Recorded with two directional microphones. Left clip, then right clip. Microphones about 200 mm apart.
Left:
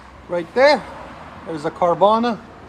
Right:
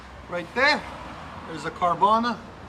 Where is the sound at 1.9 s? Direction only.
60° left (ahead or behind).